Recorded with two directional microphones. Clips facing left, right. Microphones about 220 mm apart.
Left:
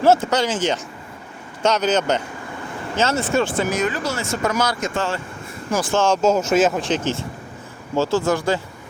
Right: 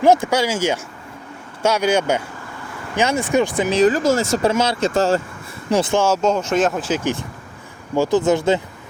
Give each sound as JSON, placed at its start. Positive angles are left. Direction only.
{"t": 0.0, "sound": "speech", "side_deg": -15}
{"t": 3.7, "sound": "speech", "side_deg": -35}
{"t": 4.5, "sound": "speech", "side_deg": -25}
{"t": 4.9, "sound": "speech", "side_deg": -40}
{"t": 5.7, "sound": "speech", "side_deg": -25}
{"t": 6.2, "sound": "speech", "side_deg": 5}